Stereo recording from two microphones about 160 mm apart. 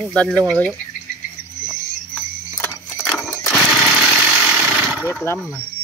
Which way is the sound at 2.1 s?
5° left (ahead or behind).